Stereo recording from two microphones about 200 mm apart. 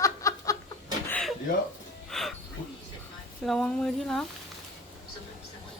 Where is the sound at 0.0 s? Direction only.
15° left (ahead or behind).